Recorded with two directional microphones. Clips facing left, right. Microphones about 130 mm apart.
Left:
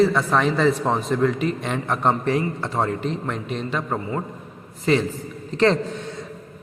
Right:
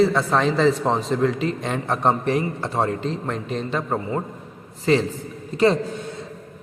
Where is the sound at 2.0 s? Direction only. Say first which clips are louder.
Even; 20° right (ahead or behind).